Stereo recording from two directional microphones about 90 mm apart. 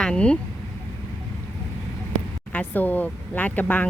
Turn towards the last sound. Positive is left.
turn(degrees=20)  # may be behind; listen again after turning